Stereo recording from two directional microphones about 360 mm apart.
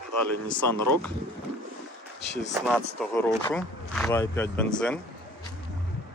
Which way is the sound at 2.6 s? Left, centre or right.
Centre.